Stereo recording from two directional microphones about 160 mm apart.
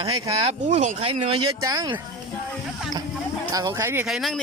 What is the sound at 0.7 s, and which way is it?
Speech, 45° right (ahead or behind).